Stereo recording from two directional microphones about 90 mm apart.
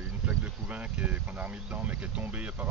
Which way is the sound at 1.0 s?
15° right (ahead or behind).